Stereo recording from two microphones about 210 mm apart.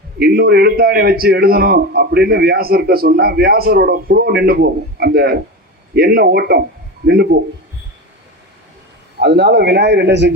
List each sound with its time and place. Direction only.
0.2 s a man's voice: 50° right (ahead or behind)
9.1 s a man's voice: 55° right (ahead or behind)